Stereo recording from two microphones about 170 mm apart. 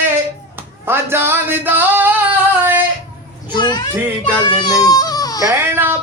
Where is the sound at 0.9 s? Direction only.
15° right (ahead or behind).